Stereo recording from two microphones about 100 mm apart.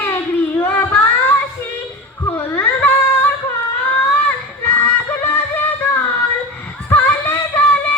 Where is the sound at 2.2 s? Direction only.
25° left (ahead or behind).